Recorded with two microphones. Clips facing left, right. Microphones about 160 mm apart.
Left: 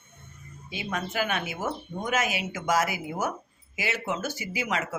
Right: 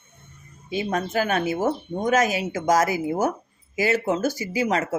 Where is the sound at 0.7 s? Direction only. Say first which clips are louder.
Right 7 dB; 40° right (ahead or behind).